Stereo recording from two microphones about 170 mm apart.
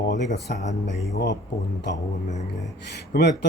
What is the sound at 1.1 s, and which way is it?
Speech, 90° left.